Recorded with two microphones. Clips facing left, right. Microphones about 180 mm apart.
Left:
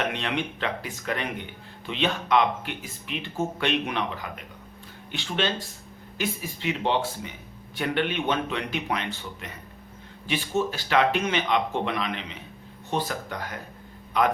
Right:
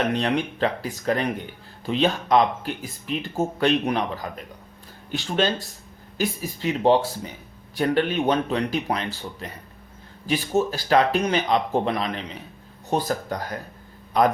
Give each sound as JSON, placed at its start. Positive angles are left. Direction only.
{"t": 0.1, "sound": "a man's voice", "side_deg": -40}